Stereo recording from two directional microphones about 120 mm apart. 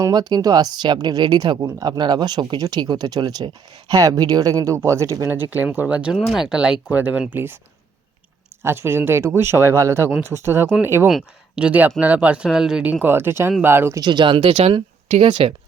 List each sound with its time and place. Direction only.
0.0 s speech: 35° right (ahead or behind); by 6.1 s 10° right (ahead or behind)
6.1 s speech: centre (ahead or behind); by 7.6 s 20° right (ahead or behind)
8.6 s speech: 20° right (ahead or behind)
11.1 s speech: 10° right (ahead or behind)
14.0 s speech: 40° right (ahead or behind)